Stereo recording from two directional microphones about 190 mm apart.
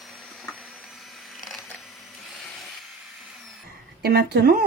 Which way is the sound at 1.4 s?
Centre (ahead or behind).